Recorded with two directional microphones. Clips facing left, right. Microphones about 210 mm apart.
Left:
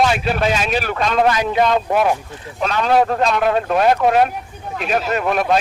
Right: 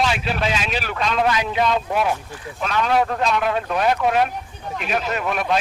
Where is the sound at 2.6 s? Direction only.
35° left (ahead or behind).